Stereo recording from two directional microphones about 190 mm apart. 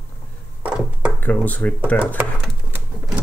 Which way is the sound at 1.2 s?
10° left (ahead or behind).